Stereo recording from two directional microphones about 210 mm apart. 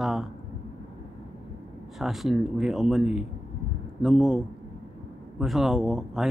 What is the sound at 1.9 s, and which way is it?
Speech, centre (ahead or behind).